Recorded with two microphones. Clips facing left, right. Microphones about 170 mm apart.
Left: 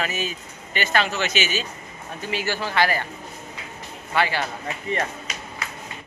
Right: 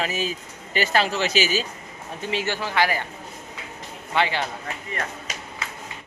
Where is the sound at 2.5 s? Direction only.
15° right (ahead or behind).